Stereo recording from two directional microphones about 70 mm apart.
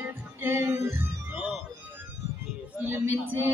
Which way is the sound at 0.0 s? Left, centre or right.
Right.